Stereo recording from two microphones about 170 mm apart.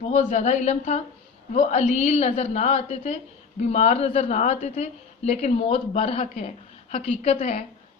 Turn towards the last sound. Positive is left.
turn(degrees=40)  # may be behind; listen again after turning